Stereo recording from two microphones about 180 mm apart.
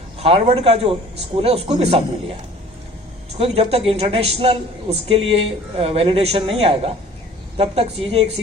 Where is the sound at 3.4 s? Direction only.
30° right (ahead or behind).